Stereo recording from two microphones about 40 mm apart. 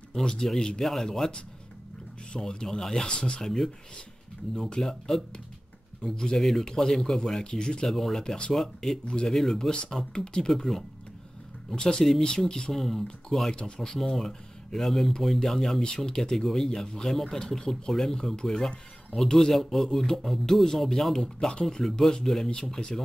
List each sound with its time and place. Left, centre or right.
0.1 s a man's voice: centre
2.3 s speech: centre
3.2 s speech: left
3.4 s speech: centre
7.9 s speech: centre
9.0 s speech: left
9.3 s speech: centre
10.1 s speech: centre
11.7 s speech: left
12.8 s speech: centre
13.5 s speech: left
13.7 s speech: centre